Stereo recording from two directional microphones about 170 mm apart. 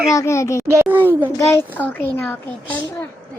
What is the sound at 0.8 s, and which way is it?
Speech, 10° right (ahead or behind).